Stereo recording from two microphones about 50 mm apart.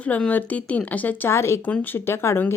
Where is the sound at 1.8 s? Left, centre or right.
Left.